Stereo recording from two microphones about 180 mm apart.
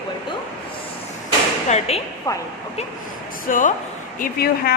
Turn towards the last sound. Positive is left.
turn(degrees=55)  # may be behind; listen again after turning